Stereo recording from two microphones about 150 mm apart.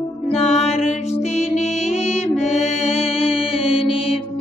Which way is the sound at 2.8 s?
45° left (ahead or behind).